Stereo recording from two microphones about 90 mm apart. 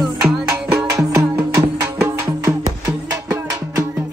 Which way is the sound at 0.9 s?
35° right (ahead or behind).